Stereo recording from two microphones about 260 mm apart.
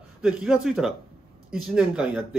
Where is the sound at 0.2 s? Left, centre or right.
Centre.